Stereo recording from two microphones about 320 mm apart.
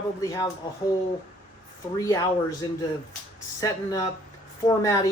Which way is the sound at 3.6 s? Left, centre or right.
Centre.